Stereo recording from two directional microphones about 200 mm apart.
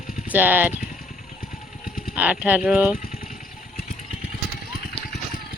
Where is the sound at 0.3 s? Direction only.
10° right (ahead or behind).